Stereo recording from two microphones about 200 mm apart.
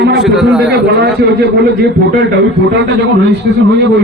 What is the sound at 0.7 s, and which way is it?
A man's voice, 55° right (ahead or behind).